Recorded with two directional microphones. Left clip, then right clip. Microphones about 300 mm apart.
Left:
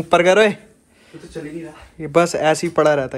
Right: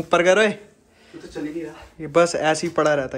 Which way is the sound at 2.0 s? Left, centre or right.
Centre.